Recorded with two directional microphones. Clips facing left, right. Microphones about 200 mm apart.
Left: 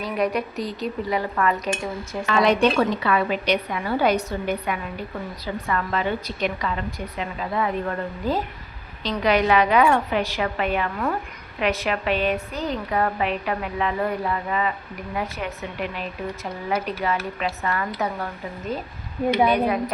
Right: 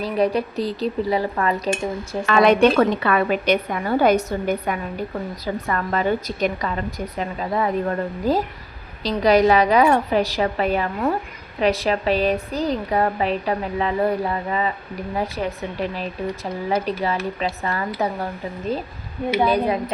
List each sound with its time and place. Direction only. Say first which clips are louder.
0.0 s a woman's voice: right 4 dB; 30° right (ahead or behind)
2.2 s a woman's voice: right 4 dB; 55° right (ahead or behind); by 19.8 s 30° right (ahead or behind)